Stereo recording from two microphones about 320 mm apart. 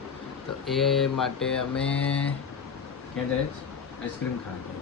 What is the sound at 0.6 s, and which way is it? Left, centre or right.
Speech, centre.